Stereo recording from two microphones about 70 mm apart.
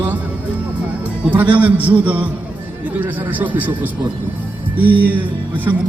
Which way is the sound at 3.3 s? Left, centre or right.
Right.